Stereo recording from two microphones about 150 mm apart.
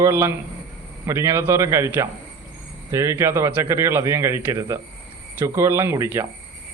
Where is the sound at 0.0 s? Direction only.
15° right (ahead or behind).